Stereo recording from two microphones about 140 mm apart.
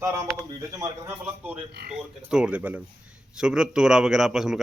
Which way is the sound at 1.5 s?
5° right (ahead or behind).